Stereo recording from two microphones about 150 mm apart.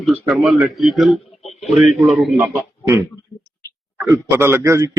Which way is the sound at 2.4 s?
15° right (ahead or behind).